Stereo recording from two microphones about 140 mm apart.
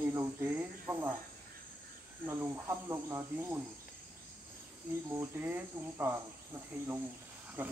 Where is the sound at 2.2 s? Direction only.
20° right (ahead or behind).